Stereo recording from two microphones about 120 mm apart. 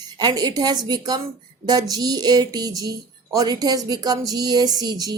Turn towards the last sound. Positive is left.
turn(degrees=-35)  # may be behind; listen again after turning